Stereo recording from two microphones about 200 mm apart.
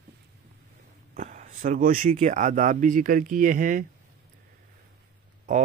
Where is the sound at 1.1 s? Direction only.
40° right (ahead or behind).